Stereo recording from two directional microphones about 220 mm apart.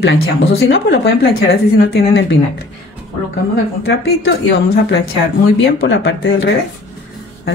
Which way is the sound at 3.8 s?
50° left (ahead or behind).